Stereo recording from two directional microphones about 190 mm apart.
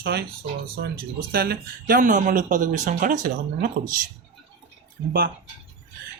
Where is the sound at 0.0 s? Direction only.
60° right (ahead or behind).